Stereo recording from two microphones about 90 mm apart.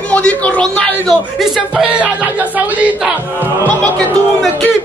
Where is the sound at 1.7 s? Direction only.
10° right (ahead or behind).